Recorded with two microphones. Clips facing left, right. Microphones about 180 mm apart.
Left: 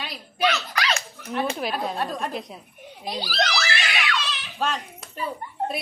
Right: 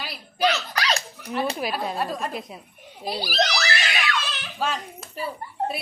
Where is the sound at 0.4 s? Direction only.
35° right (ahead or behind).